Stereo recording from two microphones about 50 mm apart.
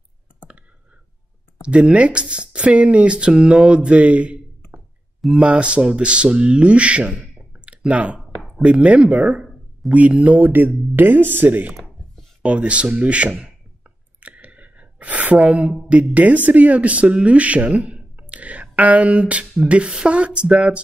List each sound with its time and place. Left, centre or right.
1.6 s speech: right
7.3 s clicking: right
8.6 s speech: right
12.4 s speech: right
14.2 s a sound: right
15.9 s speech: right